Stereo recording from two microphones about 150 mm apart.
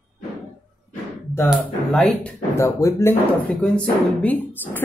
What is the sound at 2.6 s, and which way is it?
Speech, 20° left (ahead or behind).